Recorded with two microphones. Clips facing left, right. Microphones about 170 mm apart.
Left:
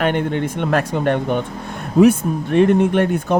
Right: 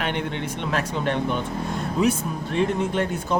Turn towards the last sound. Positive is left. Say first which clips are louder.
# left 7 dB
turn(degrees=60)  # may be behind; listen again after turning